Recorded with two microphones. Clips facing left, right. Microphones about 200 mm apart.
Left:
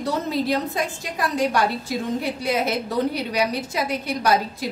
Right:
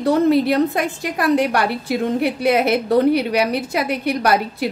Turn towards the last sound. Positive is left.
turn(degrees=-65)  # may be behind; listen again after turning